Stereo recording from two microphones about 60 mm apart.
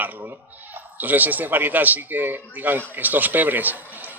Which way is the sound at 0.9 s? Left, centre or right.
Right.